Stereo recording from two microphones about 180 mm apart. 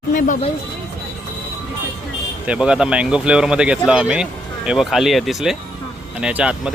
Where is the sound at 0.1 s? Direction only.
45° left (ahead or behind).